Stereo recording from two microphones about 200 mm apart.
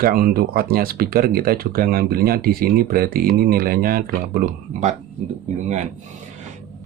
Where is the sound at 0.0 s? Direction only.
45° right (ahead or behind).